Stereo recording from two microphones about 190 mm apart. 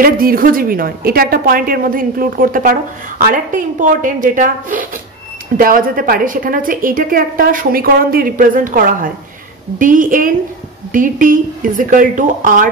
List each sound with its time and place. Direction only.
0.0 s a woman's voice: 50° right (ahead or behind)